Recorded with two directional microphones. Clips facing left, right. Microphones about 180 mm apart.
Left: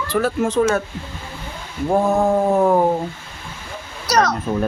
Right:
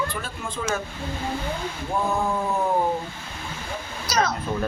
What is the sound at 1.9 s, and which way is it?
Speech, 45° left (ahead or behind).